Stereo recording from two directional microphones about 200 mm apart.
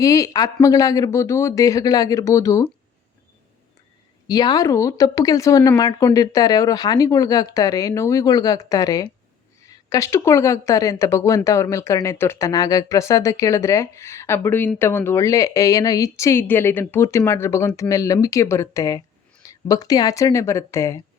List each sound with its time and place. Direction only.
0.0 s a woman's voice: 15° left (ahead or behind)
4.3 s a woman's voice: 20° left (ahead or behind)